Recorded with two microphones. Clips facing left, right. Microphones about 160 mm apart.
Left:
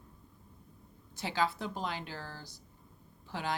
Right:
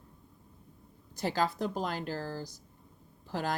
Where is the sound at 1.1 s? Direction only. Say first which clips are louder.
Right 2 dB; 40° right (ahead or behind).